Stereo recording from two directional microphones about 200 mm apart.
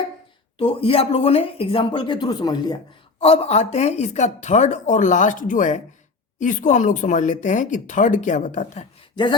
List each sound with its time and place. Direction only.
0.6 s speech: 30° left (ahead or behind)